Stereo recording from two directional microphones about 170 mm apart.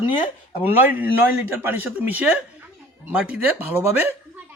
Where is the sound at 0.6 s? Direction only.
10° right (ahead or behind).